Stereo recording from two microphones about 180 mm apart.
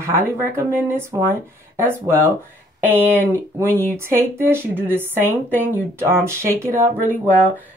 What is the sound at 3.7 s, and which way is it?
A woman's voice, 15° right (ahead or behind).